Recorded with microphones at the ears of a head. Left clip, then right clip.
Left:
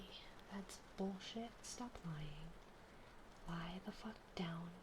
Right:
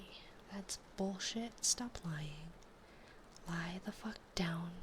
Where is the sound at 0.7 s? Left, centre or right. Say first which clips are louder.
Right 7 dB; right.